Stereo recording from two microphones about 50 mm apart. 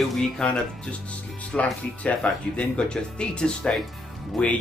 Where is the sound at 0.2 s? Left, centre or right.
Centre.